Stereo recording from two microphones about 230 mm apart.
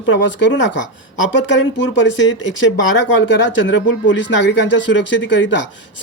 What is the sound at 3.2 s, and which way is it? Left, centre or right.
Speech, left.